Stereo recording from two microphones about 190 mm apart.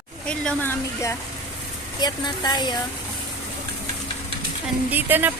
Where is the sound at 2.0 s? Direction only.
20° left (ahead or behind).